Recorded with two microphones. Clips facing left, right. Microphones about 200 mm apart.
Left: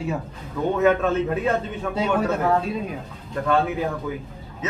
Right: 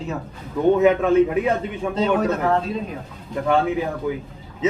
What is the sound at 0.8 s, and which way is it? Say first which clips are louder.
Speech: right 1 dB; 15° right (ahead or behind).